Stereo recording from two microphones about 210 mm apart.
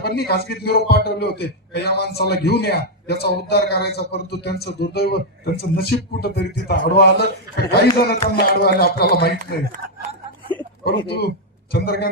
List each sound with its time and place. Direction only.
0.0 s speech: 50° left (ahead or behind)
10.8 s speech: 50° left (ahead or behind)